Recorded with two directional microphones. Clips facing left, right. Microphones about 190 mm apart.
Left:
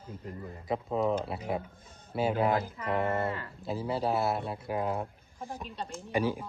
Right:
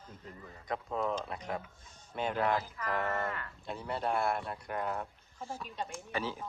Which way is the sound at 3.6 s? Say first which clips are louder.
Left 5 dB; centre (ahead or behind).